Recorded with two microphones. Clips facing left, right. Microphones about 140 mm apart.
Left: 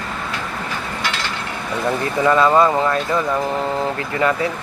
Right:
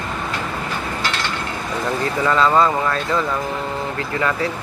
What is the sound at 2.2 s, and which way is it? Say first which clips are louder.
Speech: left 2 dB; 20° left (ahead or behind).